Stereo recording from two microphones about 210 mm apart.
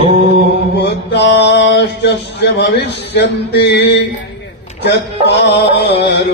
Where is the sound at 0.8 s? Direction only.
55° left (ahead or behind).